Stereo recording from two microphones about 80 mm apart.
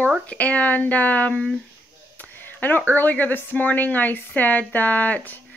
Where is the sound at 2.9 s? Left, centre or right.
Left.